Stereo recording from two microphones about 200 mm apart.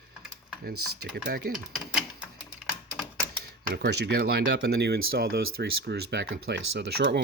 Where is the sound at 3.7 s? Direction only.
50° right (ahead or behind).